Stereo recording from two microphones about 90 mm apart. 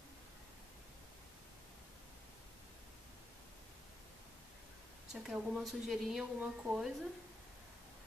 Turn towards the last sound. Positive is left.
turn(degrees=-5)  # may be behind; listen again after turning